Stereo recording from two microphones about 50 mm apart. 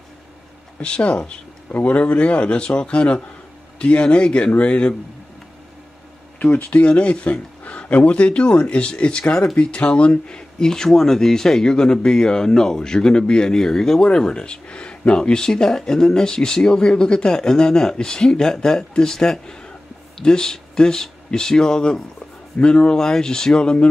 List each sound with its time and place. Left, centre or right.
0.7 s speech: left
1.7 s speech: left
6.4 s speech: left